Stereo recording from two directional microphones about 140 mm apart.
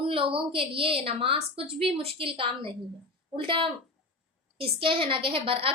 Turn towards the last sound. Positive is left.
turn(degrees=-40)  # may be behind; listen again after turning